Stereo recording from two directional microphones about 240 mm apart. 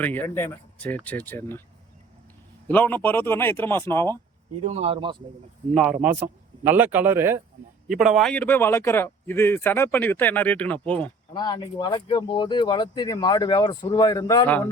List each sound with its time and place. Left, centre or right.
0.0 s speech: centre
2.6 s speech: centre
4.6 s speech: right
5.7 s speech: centre
11.3 s speech: centre